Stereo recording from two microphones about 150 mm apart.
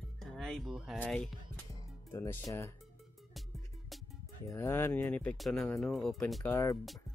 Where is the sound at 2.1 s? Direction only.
20° left (ahead or behind).